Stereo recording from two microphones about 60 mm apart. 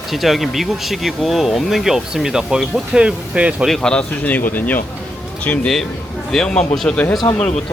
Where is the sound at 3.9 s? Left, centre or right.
Centre.